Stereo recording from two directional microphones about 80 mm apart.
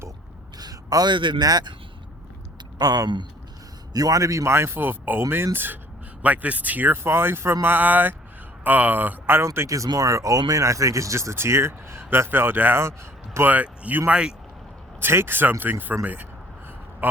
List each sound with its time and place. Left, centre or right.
0.6 s a sound: right
1.1 s speech: right
2.7 s speech: right
3.9 s a man's voice: right
9.5 s a man's voice: right; by 14.3 s centre
15.0 s speech: right